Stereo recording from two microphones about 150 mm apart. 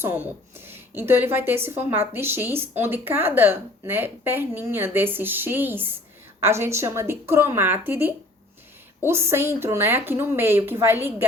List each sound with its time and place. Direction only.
0.0 s a woman's voice: 15° right (ahead or behind)